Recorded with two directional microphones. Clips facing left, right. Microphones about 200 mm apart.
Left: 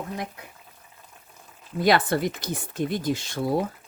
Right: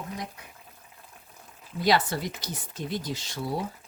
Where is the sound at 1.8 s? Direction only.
55° left (ahead or behind).